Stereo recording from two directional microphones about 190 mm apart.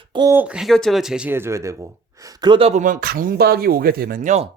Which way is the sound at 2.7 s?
40° right (ahead or behind).